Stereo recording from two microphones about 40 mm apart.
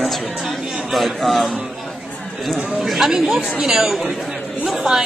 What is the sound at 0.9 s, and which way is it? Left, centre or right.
Speech, centre.